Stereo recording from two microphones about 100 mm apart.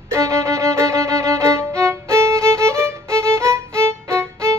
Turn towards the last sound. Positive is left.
turn(degrees=-25)  # may be behind; listen again after turning